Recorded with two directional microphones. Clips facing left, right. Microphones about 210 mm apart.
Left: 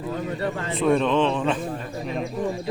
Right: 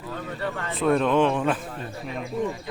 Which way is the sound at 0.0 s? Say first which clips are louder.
Left 4 dB; 20° left (ahead or behind).